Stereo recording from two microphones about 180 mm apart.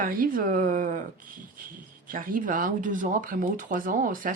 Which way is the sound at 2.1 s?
50° right (ahead or behind).